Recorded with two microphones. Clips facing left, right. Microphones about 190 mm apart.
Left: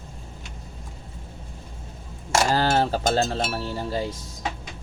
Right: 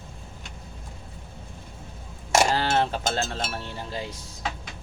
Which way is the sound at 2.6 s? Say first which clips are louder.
Left 3 dB; 40° left (ahead or behind).